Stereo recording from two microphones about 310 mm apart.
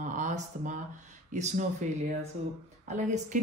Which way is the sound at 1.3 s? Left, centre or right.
Right.